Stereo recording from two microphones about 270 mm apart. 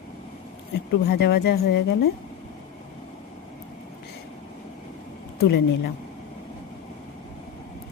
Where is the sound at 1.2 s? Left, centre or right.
Left.